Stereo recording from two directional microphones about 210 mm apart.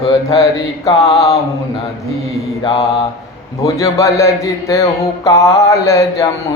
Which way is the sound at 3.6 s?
15° left (ahead or behind).